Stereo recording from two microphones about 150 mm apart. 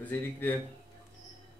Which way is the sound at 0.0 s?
15° left (ahead or behind).